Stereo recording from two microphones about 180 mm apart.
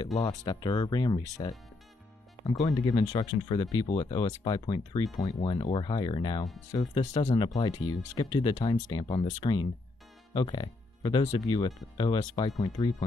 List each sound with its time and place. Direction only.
0.5 s speech: 25° left (ahead or behind)
2.6 s speech: 20° left (ahead or behind)
7.3 s speech: 25° left (ahead or behind)